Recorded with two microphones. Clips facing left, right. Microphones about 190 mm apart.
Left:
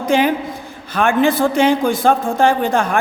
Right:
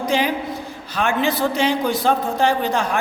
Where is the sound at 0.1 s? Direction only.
55° left (ahead or behind).